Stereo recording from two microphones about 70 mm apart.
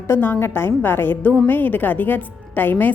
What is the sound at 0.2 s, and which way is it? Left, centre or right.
A woman's voice, left.